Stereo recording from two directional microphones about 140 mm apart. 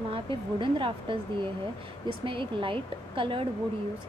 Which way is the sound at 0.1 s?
40° right (ahead or behind).